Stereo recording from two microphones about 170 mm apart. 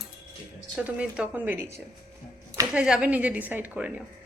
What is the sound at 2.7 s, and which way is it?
Speech, 5° right (ahead or behind).